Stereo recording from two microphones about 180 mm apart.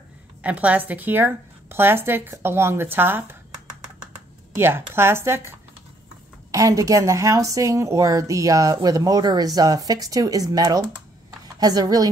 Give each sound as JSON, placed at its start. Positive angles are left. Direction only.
{"t": 0.4, "sound": "a woman's voice", "side_deg": -10}
{"t": 4.6, "sound": "a woman's voice", "side_deg": -15}
{"t": 6.5, "sound": "a woman's voice", "side_deg": -20}